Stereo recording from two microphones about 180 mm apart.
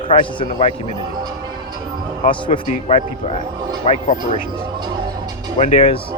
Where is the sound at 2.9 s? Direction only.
35° left (ahead or behind).